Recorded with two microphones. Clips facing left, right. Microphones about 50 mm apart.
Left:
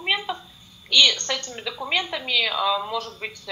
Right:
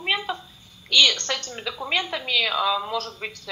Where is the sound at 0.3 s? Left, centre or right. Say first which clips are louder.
Even; centre.